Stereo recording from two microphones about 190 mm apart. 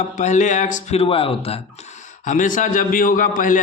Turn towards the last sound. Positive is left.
turn(degrees=45)  # may be behind; listen again after turning